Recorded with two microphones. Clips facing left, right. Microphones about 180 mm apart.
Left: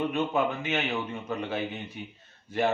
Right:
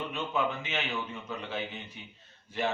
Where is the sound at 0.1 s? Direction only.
50° left (ahead or behind).